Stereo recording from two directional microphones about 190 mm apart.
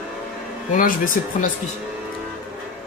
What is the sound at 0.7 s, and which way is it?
Speech, 45° left (ahead or behind).